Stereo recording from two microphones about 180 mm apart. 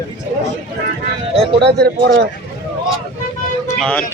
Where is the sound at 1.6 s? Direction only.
65° right (ahead or behind).